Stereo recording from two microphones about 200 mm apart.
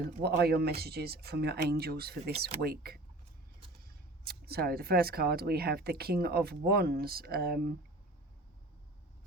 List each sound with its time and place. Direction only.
0.2 s speech: 55° right (ahead or behind)